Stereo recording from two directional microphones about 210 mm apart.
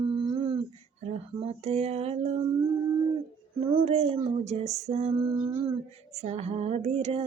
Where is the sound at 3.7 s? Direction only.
30° right (ahead or behind).